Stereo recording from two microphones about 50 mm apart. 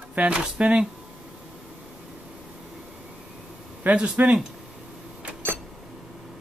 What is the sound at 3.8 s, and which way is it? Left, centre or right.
Speech, right.